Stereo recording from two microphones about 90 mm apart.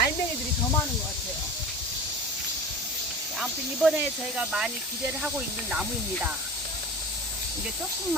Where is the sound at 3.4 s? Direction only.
5° right (ahead or behind).